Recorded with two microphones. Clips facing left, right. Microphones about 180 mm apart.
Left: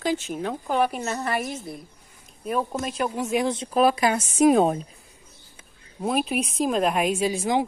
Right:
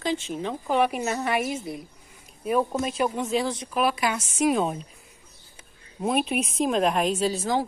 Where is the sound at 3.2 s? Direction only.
15° left (ahead or behind).